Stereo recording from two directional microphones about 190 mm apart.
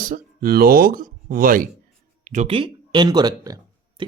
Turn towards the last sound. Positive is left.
turn(degrees=-20)  # may be behind; listen again after turning